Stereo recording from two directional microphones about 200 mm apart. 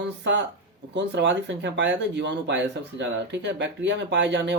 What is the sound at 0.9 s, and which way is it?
Speech, 65° right (ahead or behind).